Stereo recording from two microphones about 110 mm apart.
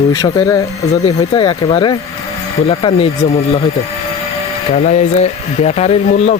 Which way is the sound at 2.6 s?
55° left (ahead or behind).